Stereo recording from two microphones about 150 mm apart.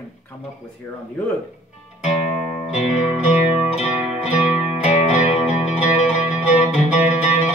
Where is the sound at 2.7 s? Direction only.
10° right (ahead or behind).